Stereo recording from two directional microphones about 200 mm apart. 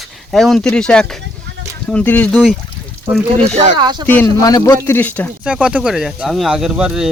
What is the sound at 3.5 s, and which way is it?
Speech, 35° right (ahead or behind).